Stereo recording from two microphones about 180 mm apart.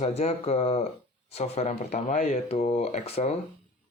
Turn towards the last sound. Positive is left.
turn(degrees=35)  # may be behind; listen again after turning